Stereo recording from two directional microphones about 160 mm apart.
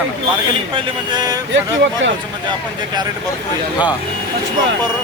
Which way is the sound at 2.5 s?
25° right (ahead or behind).